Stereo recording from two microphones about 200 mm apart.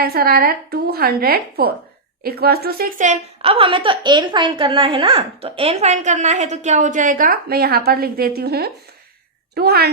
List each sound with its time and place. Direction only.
0.0 s a woman's voice: 50° right (ahead or behind)